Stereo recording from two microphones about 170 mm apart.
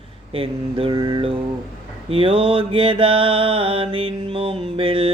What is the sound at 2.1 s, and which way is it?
Mantra, 30° right (ahead or behind).